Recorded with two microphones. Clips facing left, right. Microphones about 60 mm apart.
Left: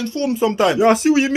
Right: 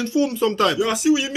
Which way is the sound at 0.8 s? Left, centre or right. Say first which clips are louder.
Left 5 dB; left.